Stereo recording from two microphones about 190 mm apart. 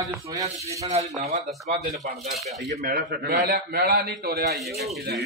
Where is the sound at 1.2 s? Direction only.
35° right (ahead or behind).